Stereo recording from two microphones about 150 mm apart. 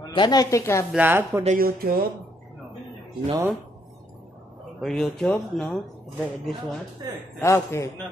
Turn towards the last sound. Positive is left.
turn(degrees=20)  # may be behind; listen again after turning